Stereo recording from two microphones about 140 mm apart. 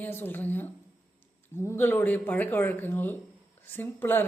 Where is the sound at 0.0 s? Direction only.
15° left (ahead or behind).